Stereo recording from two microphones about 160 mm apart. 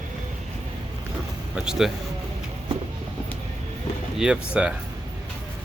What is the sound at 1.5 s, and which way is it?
Speech, 5° right (ahead or behind).